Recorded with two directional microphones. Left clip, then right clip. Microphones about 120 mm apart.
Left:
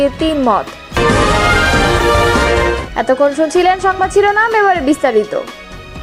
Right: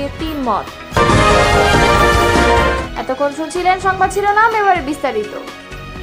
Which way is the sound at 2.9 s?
45° left (ahead or behind).